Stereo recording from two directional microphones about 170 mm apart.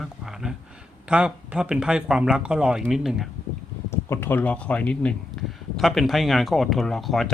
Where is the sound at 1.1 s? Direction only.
5° right (ahead or behind).